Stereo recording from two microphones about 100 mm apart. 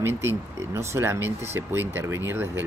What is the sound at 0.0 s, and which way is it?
Speech, 25° right (ahead or behind).